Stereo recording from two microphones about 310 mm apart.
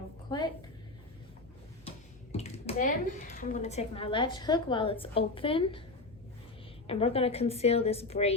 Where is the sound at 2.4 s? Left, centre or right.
Left.